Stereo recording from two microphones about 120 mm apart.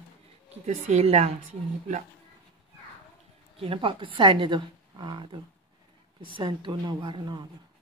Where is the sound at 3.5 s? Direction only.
45° right (ahead or behind).